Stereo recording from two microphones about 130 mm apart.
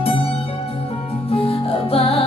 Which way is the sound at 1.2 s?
45° left (ahead or behind).